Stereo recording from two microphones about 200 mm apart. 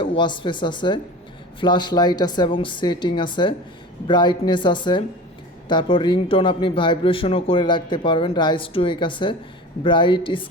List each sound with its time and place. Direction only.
0.0 s a man's voice: 25° left (ahead or behind)